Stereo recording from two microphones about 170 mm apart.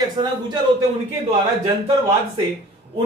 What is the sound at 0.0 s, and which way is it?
Speech, 25° right (ahead or behind).